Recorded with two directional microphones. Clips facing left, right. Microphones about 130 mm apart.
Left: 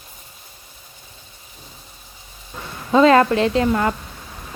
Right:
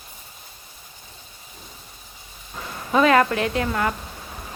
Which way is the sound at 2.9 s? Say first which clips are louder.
Left 4 dB; 25° left (ahead or behind).